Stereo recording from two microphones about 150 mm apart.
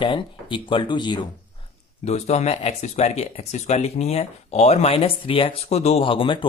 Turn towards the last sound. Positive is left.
turn(degrees=35)  # may be behind; listen again after turning